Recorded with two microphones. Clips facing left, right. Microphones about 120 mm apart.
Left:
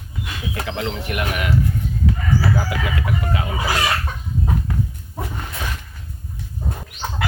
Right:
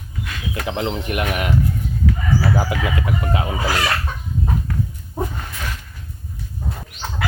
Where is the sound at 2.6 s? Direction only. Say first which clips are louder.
Right 2 dB; 25° right (ahead or behind).